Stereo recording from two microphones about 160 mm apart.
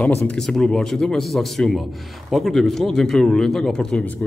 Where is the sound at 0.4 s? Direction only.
5° left (ahead or behind).